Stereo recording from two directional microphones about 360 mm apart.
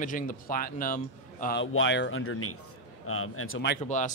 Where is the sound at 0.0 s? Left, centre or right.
Left.